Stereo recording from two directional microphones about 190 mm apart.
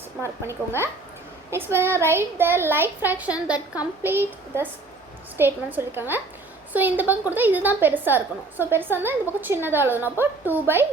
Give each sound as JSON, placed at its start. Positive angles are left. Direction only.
{"t": 0.2, "sound": "a woman's voice", "side_deg": -15}